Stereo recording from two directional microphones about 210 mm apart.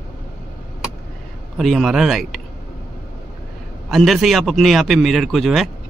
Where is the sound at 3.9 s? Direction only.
Centre (ahead or behind).